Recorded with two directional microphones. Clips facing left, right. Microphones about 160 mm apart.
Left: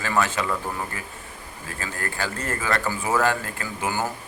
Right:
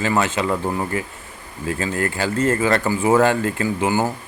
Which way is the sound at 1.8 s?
20° right (ahead or behind).